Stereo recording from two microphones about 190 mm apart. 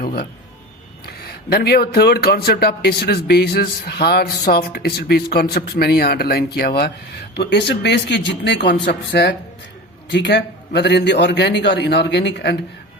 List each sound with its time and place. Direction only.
0.0 s speech: 55° left (ahead or behind)